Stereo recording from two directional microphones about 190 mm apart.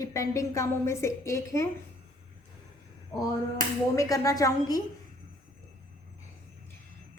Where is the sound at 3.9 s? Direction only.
15° left (ahead or behind).